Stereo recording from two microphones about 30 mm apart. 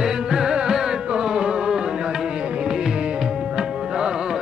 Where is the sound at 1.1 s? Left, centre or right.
Right.